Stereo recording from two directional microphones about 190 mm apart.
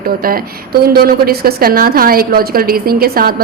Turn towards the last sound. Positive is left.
turn(degrees=-50)  # may be behind; listen again after turning